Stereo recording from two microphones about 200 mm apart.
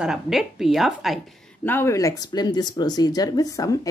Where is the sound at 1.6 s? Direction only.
10° left (ahead or behind).